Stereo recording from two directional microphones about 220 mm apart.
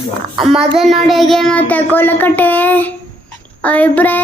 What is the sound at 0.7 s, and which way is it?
Child singing, centre (ahead or behind).